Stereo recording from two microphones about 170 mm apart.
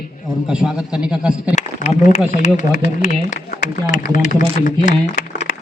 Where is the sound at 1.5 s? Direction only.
45° left (ahead or behind).